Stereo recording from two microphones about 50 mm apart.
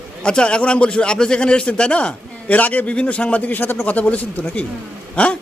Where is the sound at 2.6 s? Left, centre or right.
Left.